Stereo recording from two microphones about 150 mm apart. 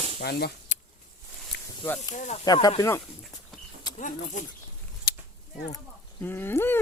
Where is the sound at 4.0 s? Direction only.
55° left (ahead or behind).